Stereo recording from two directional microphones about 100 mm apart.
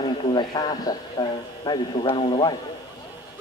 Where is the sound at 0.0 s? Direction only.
50° left (ahead or behind).